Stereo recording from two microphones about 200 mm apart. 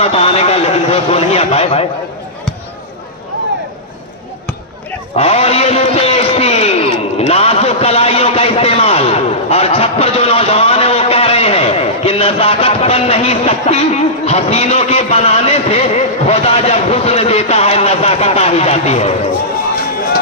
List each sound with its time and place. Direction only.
0.0 s a man's voice: 30° left (ahead or behind)
5.1 s a man's voice: 30° left (ahead or behind)